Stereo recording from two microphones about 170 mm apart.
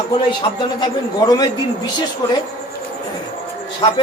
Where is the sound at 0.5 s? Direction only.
25° left (ahead or behind).